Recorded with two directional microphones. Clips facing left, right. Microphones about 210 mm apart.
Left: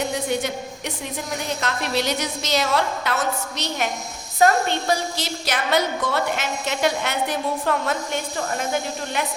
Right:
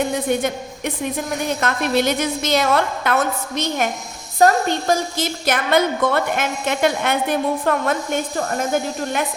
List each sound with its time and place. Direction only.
0.0 s a woman's voice: 50° right (ahead or behind)